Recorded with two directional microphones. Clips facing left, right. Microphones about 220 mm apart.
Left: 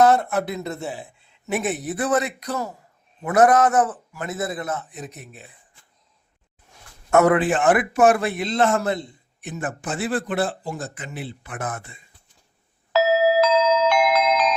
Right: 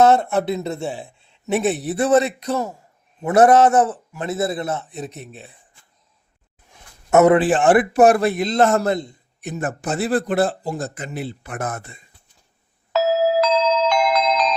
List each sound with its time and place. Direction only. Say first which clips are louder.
0.0 s a man's voice: right 2 dB; 25° right (ahead or behind)
7.1 s a man's voice: right 3 dB; 20° right (ahead or behind)
7.3 s a man's voice: right 4 dB; 30° right (ahead or behind)
13.4 s glockenspiel: even; 5° left (ahead or behind)